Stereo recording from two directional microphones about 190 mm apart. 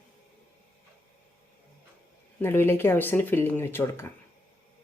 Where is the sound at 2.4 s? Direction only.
10° left (ahead or behind).